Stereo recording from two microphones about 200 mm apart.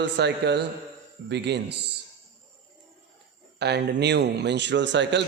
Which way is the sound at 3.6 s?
55° right (ahead or behind).